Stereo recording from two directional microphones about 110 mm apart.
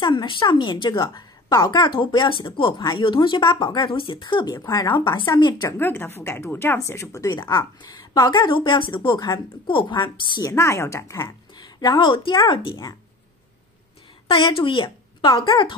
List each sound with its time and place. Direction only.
0.0 s speech: 45° left (ahead or behind)
4.6 s a woman's voice: 30° left (ahead or behind)
4.9 s speech: 45° left (ahead or behind)
5.8 s a woman's voice: 20° left (ahead or behind)
7.5 s speech: 40° left (ahead or behind)
10.4 s a woman's voice: 25° left (ahead or behind)
11.2 s speech: 40° left (ahead or behind)
14.2 s speech: 50° left (ahead or behind)